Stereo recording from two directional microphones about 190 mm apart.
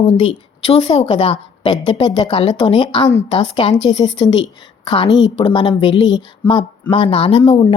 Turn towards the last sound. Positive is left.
turn(degrees=25)  # may be behind; listen again after turning